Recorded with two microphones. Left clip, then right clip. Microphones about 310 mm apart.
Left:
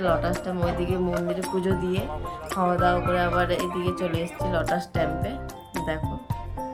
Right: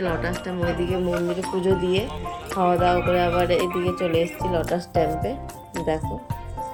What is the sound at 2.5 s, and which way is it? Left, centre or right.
Music, left.